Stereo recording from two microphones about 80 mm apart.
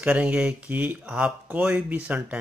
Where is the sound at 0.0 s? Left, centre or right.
Centre.